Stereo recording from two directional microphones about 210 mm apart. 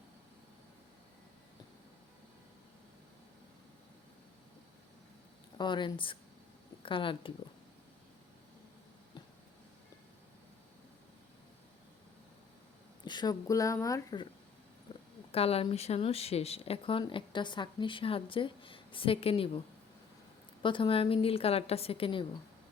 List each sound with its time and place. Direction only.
5.5 s speech: 20° left (ahead or behind)
13.1 s speech: 20° left (ahead or behind)
14.9 s a sound: 25° left (ahead or behind)
15.3 s speech: 30° left (ahead or behind)